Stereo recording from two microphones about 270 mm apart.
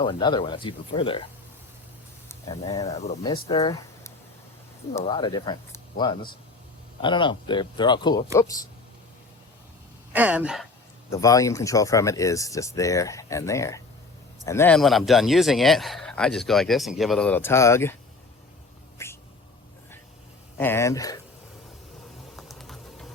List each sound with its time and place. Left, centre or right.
0.0 s speech: centre
2.6 s speech: left
10.1 s speech: centre
11.1 s speech: centre
19.0 s cat: centre
20.6 s speech: centre
22.4 s a sound: centre